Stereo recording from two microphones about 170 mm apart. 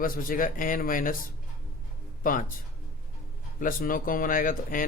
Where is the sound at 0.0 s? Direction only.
55° left (ahead or behind).